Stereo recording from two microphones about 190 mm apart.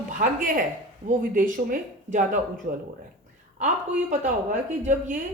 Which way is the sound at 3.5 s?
40° right (ahead or behind).